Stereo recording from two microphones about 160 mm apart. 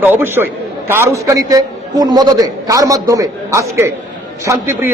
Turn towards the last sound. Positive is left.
turn(degrees=-15)  # may be behind; listen again after turning